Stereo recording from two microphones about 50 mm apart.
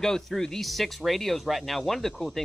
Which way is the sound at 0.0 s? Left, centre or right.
Centre.